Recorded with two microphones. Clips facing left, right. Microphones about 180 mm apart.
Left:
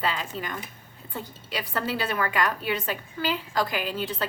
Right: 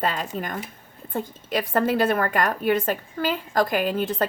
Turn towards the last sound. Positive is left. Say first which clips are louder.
# right 6 dB
turn(degrees=-50)  # may be behind; listen again after turning